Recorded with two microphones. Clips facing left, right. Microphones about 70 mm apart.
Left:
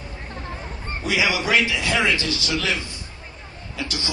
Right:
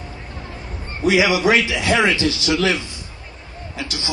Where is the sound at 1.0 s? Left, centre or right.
Right.